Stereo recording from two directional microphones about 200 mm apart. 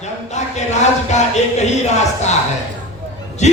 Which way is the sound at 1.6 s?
35° left (ahead or behind).